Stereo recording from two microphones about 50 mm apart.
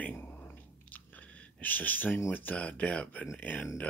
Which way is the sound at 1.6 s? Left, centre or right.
Left.